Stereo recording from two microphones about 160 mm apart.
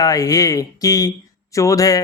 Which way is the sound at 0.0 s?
20° left (ahead or behind).